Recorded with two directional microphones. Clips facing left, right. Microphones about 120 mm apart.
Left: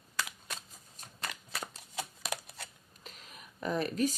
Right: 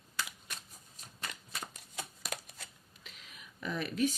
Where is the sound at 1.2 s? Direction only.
70° left (ahead or behind).